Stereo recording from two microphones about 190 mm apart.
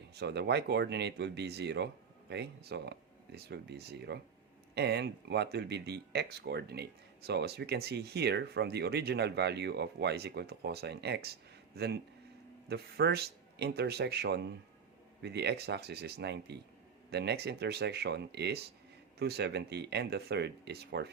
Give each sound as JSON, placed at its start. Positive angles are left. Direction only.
{"t": 0.1, "sound": "speech", "side_deg": -60}